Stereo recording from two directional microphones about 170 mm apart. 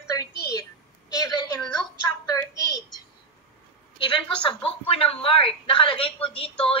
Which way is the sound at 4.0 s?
30° left (ahead or behind).